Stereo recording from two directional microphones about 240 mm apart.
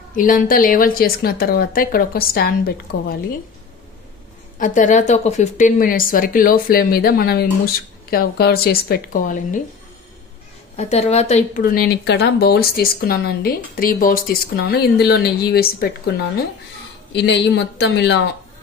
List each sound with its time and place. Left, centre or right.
0.1 s a woman's voice: left
4.6 s a woman's voice: left
10.8 s a woman's voice: left
17.1 s speech: left